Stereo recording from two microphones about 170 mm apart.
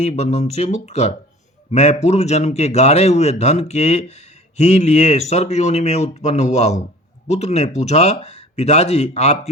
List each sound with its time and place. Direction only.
0.0 s a man's voice: 40° left (ahead or behind)